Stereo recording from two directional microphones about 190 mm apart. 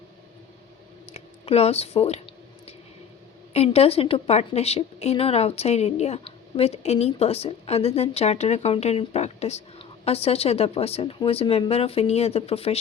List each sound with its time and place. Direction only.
1.1 s speech: 35° left (ahead or behind)
3.5 s a woman's voice: 35° left (ahead or behind)